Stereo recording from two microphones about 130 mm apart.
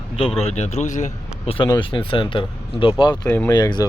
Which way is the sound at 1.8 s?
40° left (ahead or behind).